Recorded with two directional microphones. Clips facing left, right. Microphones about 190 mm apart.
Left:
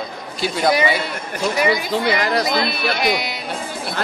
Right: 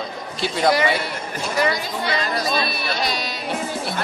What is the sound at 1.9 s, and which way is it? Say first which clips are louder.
Speech: left 5 dB; 80° left.